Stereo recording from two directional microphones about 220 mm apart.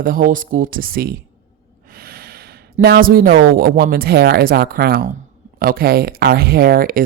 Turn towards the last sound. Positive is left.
turn(degrees=-40)  # may be behind; listen again after turning